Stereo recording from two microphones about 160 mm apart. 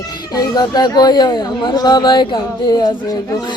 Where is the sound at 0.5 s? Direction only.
25° left (ahead or behind).